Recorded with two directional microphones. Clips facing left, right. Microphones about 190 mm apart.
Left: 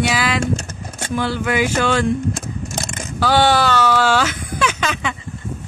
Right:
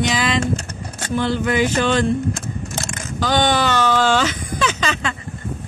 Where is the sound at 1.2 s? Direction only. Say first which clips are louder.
Right 1 dB; 10° left (ahead or behind).